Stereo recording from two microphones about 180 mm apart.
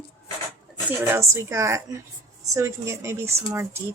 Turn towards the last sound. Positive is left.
turn(degrees=-15)  # may be behind; listen again after turning